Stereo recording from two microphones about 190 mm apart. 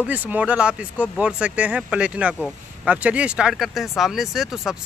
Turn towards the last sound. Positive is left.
turn(degrees=0)  # may be behind; listen again after turning